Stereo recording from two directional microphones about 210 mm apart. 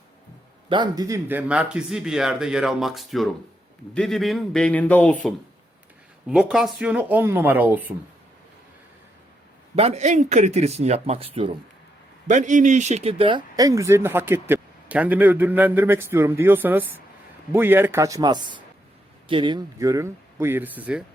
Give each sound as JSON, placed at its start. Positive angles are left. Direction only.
{"t": 0.7, "sound": "speech", "side_deg": -20}
{"t": 6.2, "sound": "speech", "side_deg": -5}
{"t": 9.7, "sound": "speech", "side_deg": -30}